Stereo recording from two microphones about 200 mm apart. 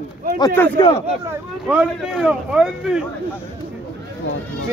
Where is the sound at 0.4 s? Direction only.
20° left (ahead or behind).